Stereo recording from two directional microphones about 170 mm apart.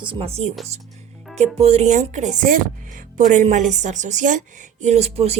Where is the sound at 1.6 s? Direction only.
40° right (ahead or behind).